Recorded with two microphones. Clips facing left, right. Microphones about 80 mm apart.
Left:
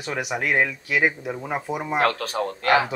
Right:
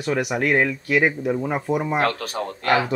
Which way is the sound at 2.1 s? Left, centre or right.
Left.